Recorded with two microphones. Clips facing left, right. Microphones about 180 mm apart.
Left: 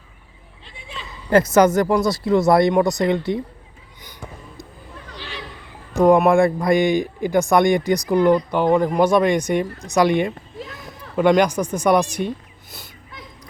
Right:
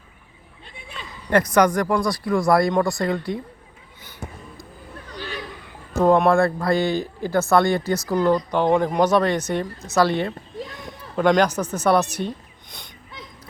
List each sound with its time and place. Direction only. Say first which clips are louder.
1.3 s speech: left 3 dB; 25° left (ahead or behind)
5.1 s chatter: right 4 dB; 45° right (ahead or behind)
6.0 s speech: left 3 dB; 10° left (ahead or behind)